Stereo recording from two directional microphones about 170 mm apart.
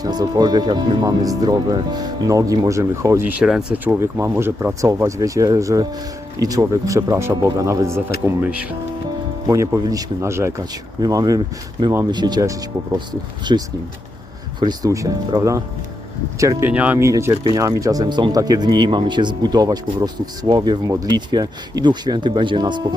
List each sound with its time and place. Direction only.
0.0 s speech: 20° right (ahead or behind); by 8.6 s 5° right (ahead or behind)
9.5 s speech: 20° right (ahead or behind)